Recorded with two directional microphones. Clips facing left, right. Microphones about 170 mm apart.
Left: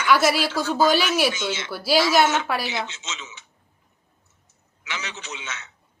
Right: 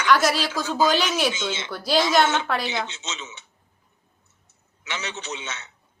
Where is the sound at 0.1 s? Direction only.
10° left (ahead or behind).